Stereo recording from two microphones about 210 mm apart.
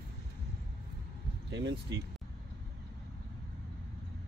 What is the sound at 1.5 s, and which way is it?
Speech, 55° right (ahead or behind).